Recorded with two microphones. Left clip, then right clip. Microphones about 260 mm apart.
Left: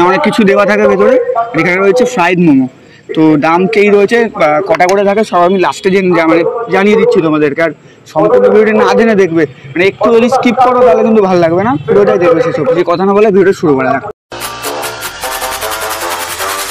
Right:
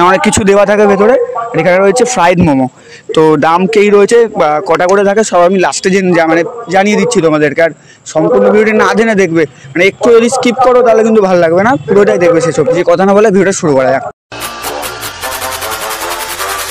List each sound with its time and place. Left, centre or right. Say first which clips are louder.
0.0 s a man's voice: right 1 dB; right